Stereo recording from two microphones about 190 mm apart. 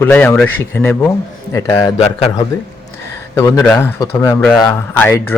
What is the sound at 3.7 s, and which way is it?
Speech, 10° left (ahead or behind).